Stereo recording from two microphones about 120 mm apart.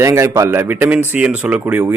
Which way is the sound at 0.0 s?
25° right (ahead or behind).